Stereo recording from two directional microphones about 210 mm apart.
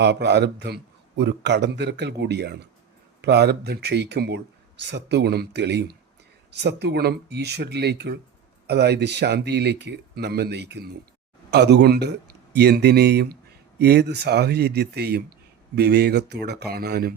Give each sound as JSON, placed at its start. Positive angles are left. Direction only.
{"t": 0.0, "sound": "a man's voice", "side_deg": -55}